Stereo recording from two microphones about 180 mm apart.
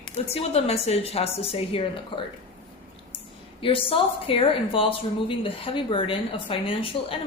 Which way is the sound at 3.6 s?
30° left (ahead or behind).